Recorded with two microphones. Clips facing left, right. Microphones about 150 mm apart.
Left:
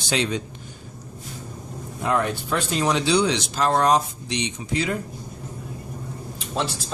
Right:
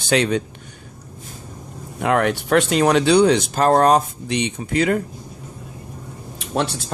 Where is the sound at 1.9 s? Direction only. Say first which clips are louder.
Right 5 dB; 70° right (ahead or behind).